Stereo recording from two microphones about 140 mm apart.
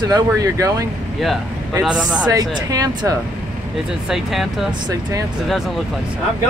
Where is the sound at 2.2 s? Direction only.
25° right (ahead or behind).